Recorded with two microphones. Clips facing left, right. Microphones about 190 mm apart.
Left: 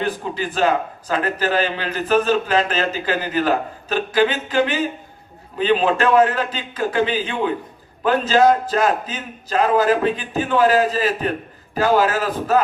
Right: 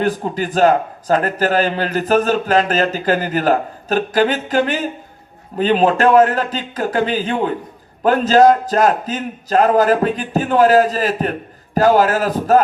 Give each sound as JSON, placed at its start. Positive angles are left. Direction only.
{"t": 0.0, "sound": "a man's voice", "side_deg": -45}